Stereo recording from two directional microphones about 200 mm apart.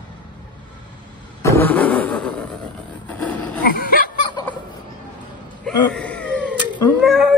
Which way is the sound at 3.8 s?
45° left (ahead or behind).